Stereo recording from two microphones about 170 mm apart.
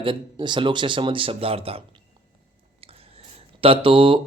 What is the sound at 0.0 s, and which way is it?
Speech, 30° right (ahead or behind).